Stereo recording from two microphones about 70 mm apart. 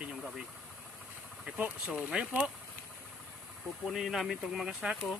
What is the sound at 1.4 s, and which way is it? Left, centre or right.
Speech, centre.